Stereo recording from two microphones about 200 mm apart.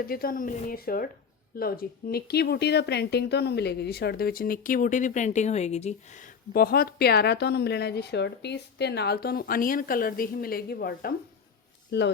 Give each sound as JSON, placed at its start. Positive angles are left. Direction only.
{"t": 0.0, "sound": "speech", "side_deg": 50}